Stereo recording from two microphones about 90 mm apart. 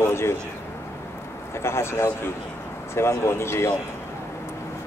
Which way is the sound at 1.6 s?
30° left (ahead or behind).